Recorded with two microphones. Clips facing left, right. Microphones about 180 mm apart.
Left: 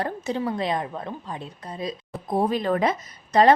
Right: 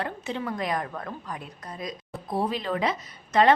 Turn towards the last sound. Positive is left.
turn(degrees=40)  # may be behind; listen again after turning